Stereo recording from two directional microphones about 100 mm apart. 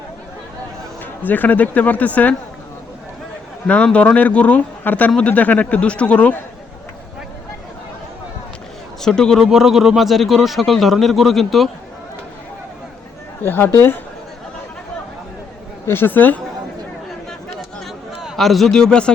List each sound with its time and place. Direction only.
1.2 s speech: 15° left (ahead or behind)
3.7 s speech: 15° left (ahead or behind)
9.0 s speech: 5° left (ahead or behind)
13.4 s speech: 20° left (ahead or behind)
15.9 s speech: 20° left (ahead or behind)
18.2 s a man's voice: centre (ahead or behind)